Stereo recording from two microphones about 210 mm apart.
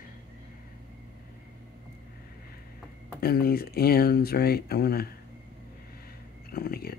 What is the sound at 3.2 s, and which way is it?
Speech, 45° left (ahead or behind).